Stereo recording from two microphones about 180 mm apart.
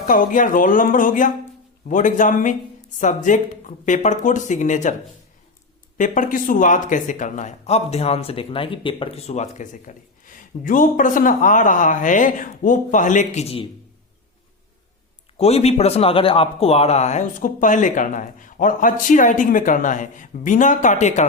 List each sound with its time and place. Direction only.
0.1 s speech: 50° left (ahead or behind)
6.0 s speech: 45° left (ahead or behind)
15.4 s speech: 35° left (ahead or behind)